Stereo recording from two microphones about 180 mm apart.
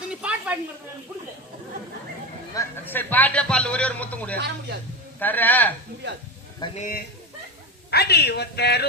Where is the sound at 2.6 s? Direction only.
10° left (ahead or behind).